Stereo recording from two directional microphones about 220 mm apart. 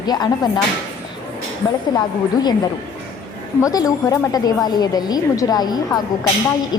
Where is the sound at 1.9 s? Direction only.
20° left (ahead or behind).